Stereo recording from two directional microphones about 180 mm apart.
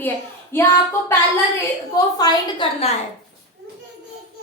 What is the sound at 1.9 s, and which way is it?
Speech, 20° left (ahead or behind).